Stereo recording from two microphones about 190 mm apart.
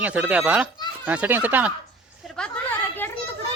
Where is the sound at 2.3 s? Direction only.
5° left (ahead or behind).